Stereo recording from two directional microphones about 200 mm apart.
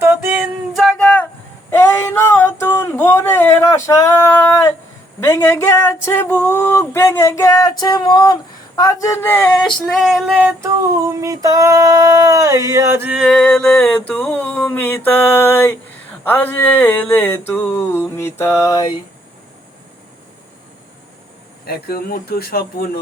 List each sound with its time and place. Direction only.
0.0 s music: 10° right (ahead or behind)
0.8 s music: 5° left (ahead or behind)
1.7 s a sound: 10° left (ahead or behind)
21.7 s speech: 50° left (ahead or behind)